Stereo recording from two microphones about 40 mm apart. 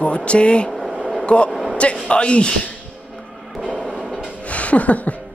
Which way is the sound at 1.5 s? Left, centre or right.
Centre.